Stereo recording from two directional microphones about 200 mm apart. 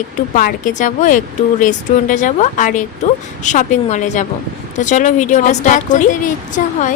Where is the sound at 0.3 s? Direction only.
40° left (ahead or behind).